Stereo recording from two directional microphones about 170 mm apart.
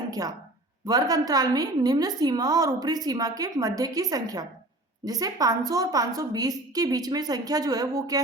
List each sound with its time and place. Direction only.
0.1 s a woman's voice: 20° right (ahead or behind)